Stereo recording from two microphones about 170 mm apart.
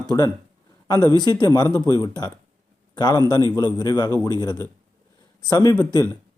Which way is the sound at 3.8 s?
25° left (ahead or behind).